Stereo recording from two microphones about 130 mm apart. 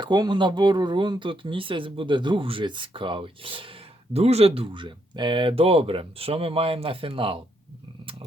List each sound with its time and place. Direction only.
0.0 s speech: 35° right (ahead or behind)